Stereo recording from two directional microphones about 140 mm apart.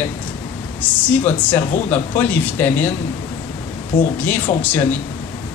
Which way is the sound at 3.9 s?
80° left.